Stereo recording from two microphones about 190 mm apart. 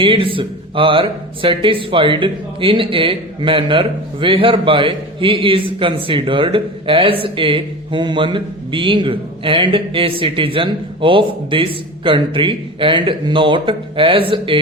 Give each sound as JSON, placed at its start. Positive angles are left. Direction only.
{"t": 0.0, "sound": "speech", "side_deg": -25}